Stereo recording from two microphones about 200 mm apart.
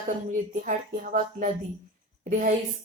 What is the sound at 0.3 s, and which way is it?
A woman's voice, 40° right (ahead or behind).